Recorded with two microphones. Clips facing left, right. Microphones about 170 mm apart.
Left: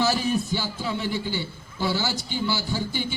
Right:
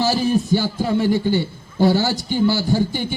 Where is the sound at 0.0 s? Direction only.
35° right (ahead or behind).